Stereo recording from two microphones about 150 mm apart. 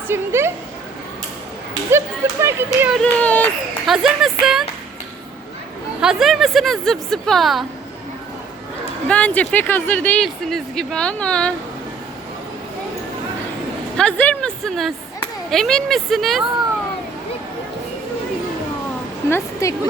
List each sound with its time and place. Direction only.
0.1 s speech: 15° right (ahead or behind)
1.9 s speech: 20° right (ahead or behind)
3.0 s speech: 10° left (ahead or behind)
3.8 s a woman's voice: centre (ahead or behind)
6.0 s a woman's voice: 5° right (ahead or behind)
9.0 s speech: 10° left (ahead or behind)
13.9 s a woman's voice: 5° left (ahead or behind)
19.3 s speech: 20° left (ahead or behind)